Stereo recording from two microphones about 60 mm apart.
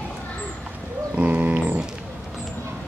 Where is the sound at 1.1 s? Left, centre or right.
Right.